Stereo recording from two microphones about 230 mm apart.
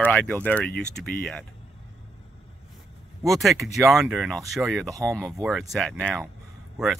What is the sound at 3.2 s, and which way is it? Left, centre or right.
Speech, centre.